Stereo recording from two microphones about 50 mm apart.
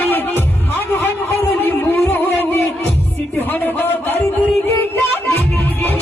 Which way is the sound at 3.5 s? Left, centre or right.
Left.